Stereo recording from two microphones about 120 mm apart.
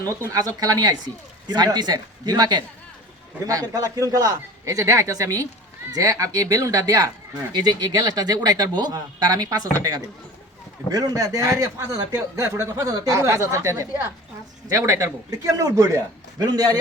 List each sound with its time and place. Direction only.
0.3 s speech: 30° right (ahead or behind)
10.8 s speech: 30° right (ahead or behind)